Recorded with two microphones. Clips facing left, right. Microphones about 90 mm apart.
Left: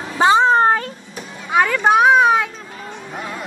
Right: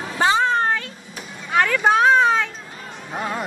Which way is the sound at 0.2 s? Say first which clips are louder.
Left 5 dB; 20° left (ahead or behind).